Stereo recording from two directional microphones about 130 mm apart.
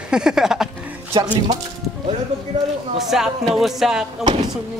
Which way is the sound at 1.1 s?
35° right (ahead or behind).